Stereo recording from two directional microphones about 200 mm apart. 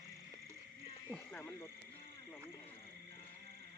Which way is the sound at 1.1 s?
10° left (ahead or behind).